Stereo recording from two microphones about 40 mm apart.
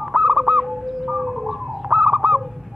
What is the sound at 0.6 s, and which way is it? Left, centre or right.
Bird, centre.